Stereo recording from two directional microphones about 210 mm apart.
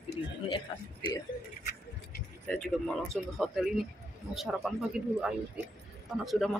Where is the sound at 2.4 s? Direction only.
5° left (ahead or behind).